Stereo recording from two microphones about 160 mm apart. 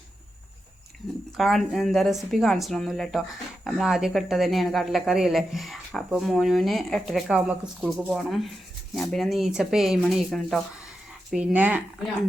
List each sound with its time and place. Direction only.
1.4 s a woman's voice: centre (ahead or behind)